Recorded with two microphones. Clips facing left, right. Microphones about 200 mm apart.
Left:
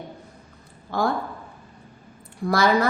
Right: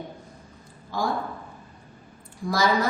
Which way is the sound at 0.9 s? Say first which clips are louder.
Left 4 dB; 60° left (ahead or behind).